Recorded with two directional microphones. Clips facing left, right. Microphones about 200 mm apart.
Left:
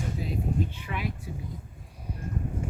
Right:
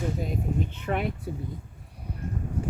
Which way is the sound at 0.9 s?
55° right (ahead or behind).